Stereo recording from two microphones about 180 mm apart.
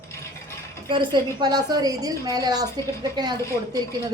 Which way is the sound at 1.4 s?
20° right (ahead or behind).